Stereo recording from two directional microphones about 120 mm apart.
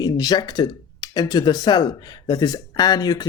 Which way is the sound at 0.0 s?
35° left (ahead or behind).